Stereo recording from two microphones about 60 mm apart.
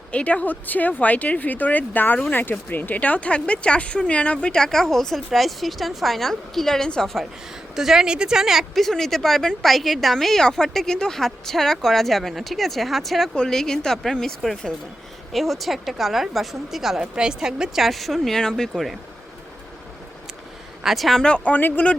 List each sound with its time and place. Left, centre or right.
0.1 s speech: left
7.8 s speech: centre
20.8 s speech: centre
21.2 s speech: centre